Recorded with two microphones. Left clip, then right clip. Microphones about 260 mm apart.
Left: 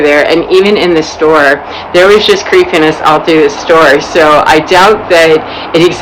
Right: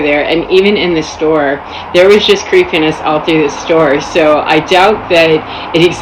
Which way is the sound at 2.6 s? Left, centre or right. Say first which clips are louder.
Left 4 dB; centre.